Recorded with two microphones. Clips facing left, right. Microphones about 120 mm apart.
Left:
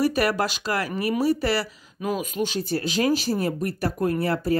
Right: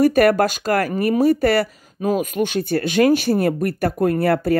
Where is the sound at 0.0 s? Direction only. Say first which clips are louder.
Right 8 dB; 50° right (ahead or behind).